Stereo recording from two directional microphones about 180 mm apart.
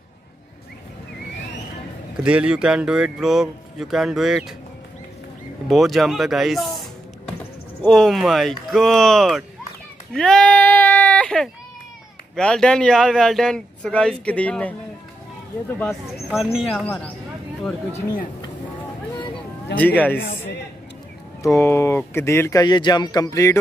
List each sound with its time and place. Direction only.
2.2 s a man's voice: 5° right (ahead or behind)
5.7 s a man's voice: centre (ahead or behind)
7.8 s a man's voice: centre (ahead or behind)
10.1 s sheep: 5° left (ahead or behind)
12.4 s a man's voice: 5° left (ahead or behind)
16.1 s a man's voice: centre (ahead or behind)
19.7 s speech: 10° left (ahead or behind)
21.4 s speech: 15° left (ahead or behind)